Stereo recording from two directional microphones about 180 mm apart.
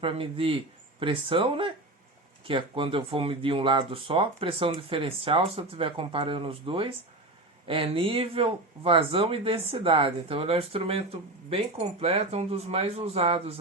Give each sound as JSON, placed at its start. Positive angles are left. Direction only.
{"t": 0.0, "sound": "speech", "side_deg": -30}